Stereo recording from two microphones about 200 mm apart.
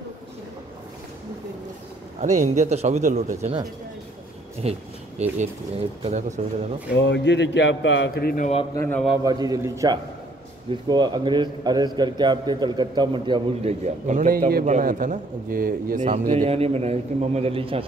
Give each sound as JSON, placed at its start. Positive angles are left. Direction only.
{"t": 2.2, "sound": "speech", "side_deg": -35}
{"t": 4.6, "sound": "speech", "side_deg": -30}
{"t": 6.9, "sound": "speech", "side_deg": 60}
{"t": 8.7, "sound": "a man's voice", "side_deg": 10}
{"t": 9.2, "sound": "a man's voice", "side_deg": -20}